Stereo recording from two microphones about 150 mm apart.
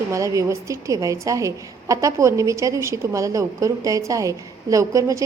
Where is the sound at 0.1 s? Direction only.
20° right (ahead or behind).